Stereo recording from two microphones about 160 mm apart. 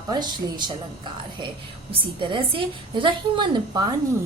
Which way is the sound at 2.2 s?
30° right (ahead or behind).